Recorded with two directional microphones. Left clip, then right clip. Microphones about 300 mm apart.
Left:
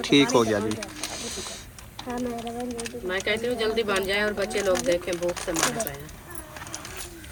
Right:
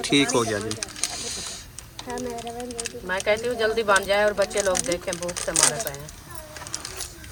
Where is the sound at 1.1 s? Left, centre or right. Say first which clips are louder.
Right 2 dB; centre.